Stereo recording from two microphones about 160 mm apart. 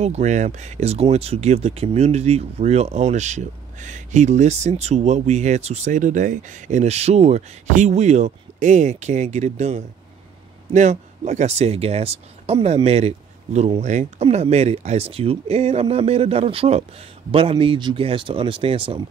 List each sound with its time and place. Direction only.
0.0 s speech: 45° right (ahead or behind)